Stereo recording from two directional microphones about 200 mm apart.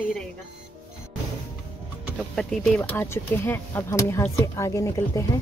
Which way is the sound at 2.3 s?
5° left (ahead or behind).